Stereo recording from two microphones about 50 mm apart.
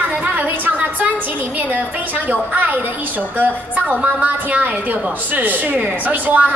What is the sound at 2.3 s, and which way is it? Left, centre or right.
A woman's voice, right.